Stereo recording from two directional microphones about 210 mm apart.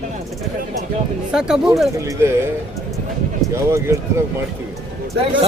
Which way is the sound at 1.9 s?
15° right (ahead or behind).